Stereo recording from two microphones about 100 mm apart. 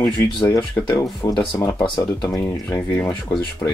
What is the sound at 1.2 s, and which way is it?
Speech, 25° left (ahead or behind).